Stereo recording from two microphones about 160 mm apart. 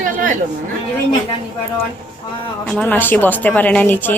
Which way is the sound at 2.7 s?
10° left (ahead or behind).